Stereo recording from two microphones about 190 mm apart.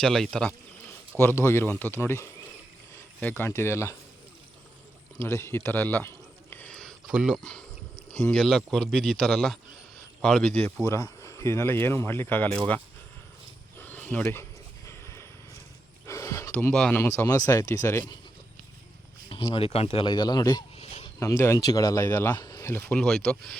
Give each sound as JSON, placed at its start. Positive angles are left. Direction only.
{"t": 0.0, "sound": "speech", "side_deg": 5}
{"t": 5.2, "sound": "a sound", "side_deg": 15}
{"t": 7.1, "sound": "speech", "side_deg": -5}
{"t": 13.7, "sound": "a sound", "side_deg": 10}
{"t": 14.8, "sound": "vehicle", "side_deg": 15}
{"t": 16.0, "sound": "speech", "side_deg": 15}
{"t": 19.3, "sound": "speech", "side_deg": 30}
{"t": 20.7, "sound": "a sound", "side_deg": 35}
{"t": 21.2, "sound": "speech", "side_deg": 15}
{"t": 22.9, "sound": "speech", "side_deg": 5}